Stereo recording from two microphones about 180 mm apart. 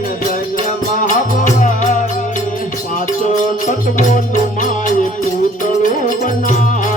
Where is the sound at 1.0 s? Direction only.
45° left (ahead or behind).